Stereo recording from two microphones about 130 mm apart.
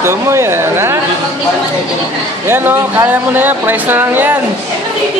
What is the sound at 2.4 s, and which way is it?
Speech, 15° right (ahead or behind).